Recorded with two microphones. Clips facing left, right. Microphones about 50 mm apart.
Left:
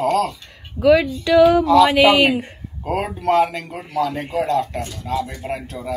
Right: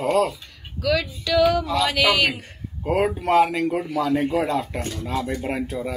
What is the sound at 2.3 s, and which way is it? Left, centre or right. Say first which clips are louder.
Speech: left 11 dB; centre.